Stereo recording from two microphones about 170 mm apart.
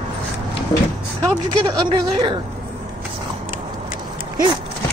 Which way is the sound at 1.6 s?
30° right (ahead or behind).